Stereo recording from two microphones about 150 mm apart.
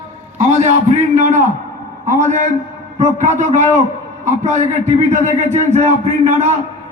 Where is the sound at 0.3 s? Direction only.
50° right (ahead or behind).